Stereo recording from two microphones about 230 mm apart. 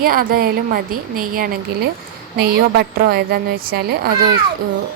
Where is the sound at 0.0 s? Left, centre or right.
Right.